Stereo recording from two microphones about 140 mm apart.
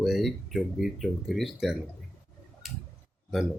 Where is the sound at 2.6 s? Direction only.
Centre (ahead or behind).